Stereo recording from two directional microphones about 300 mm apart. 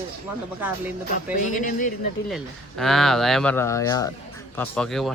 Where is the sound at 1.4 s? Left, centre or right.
Left.